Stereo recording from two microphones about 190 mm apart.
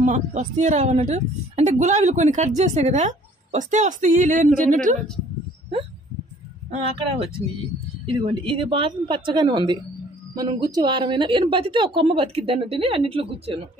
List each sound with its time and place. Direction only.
0.0 s a woman's voice: 40° right (ahead or behind)
6.7 s a woman's voice: 30° right (ahead or behind)